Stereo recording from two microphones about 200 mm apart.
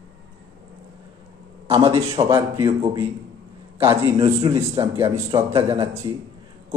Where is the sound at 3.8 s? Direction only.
10° right (ahead or behind).